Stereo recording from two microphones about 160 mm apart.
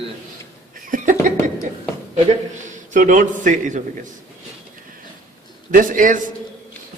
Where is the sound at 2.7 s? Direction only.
50° right (ahead or behind).